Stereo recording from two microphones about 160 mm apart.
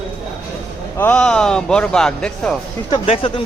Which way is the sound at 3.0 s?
35° left (ahead or behind).